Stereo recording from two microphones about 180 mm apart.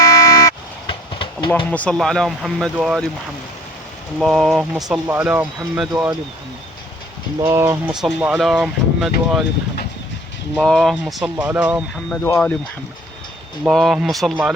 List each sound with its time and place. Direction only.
0.0 s vehicle: 20° left (ahead or behind)
1.5 s speech: 10° left (ahead or behind)
4.2 s speech: centre (ahead or behind)
7.4 s speech: 15° right (ahead or behind)
8.0 s speech: 5° right (ahead or behind)
10.6 s speech: centre (ahead or behind)
12.2 s speech: 10° left (ahead or behind)
13.7 s speech: centre (ahead or behind)